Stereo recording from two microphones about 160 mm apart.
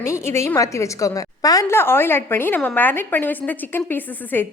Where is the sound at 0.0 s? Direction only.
15° left (ahead or behind).